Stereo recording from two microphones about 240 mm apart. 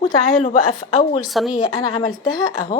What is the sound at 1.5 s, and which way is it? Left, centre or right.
A woman's voice, centre.